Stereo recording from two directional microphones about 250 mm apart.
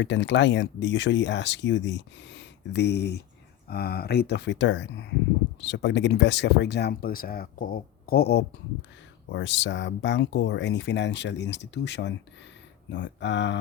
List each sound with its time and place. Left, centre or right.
0.0 s speech: left